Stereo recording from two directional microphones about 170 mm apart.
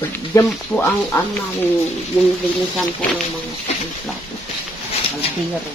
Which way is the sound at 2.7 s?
Centre (ahead or behind).